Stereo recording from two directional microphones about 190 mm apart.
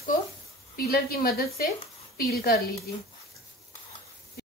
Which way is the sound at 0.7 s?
55° left (ahead or behind).